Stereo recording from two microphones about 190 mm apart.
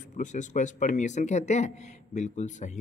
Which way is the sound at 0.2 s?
40° left (ahead or behind).